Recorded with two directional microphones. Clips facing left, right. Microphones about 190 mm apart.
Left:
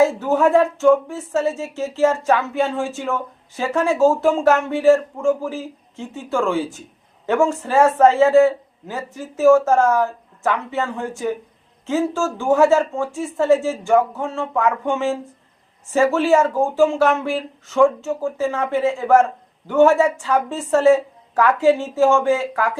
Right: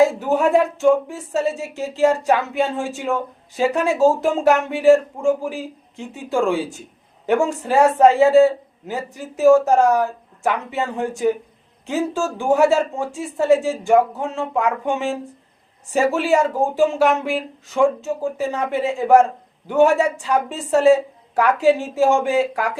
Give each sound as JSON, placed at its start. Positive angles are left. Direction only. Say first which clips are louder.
{"t": 0.2, "sound": "speech", "louder": "left 1 dB", "side_deg": -15}